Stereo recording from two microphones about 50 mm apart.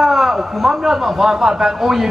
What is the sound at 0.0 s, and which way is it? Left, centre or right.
A man's voice, centre.